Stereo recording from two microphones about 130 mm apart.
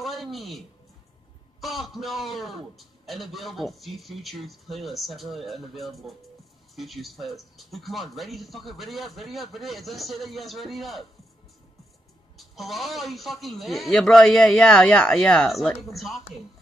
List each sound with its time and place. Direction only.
0.0 s a sound: centre (ahead or behind)
1.6 s a man's voice: centre (ahead or behind)
12.4 s a man's voice: centre (ahead or behind)